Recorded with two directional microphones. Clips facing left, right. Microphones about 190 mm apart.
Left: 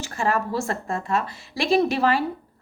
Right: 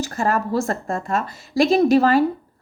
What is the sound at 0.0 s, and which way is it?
A woman's voice, 40° right (ahead or behind).